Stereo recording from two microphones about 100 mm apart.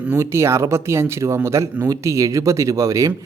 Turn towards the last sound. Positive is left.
turn(degrees=-30)  # may be behind; listen again after turning